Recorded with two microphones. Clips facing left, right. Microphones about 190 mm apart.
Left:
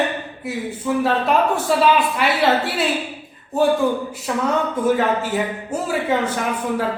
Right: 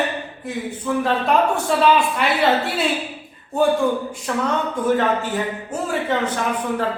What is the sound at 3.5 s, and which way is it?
A man's voice, centre (ahead or behind).